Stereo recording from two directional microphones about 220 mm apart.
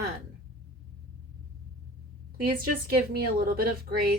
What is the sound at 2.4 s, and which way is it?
A woman's voice, 40° right (ahead or behind).